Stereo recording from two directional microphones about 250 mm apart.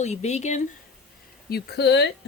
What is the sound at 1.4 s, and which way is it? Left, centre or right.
Speech, left.